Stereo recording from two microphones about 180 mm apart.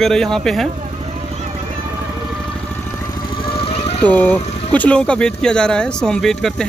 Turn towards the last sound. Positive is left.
turn(degrees=0)  # may be behind; listen again after turning